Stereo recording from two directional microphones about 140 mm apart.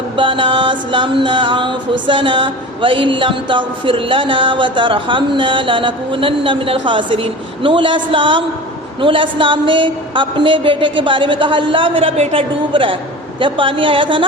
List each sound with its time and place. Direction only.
0.2 s music: 35° right (ahead or behind)